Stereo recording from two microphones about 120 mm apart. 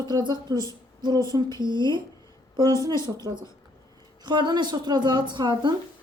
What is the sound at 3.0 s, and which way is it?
A woman's voice, 35° right (ahead or behind).